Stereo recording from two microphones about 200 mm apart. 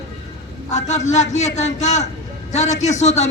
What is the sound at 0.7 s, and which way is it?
A man's voice, 35° left (ahead or behind).